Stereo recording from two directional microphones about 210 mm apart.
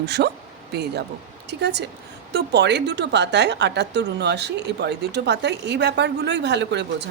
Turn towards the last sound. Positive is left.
turn(degrees=-55)  # may be behind; listen again after turning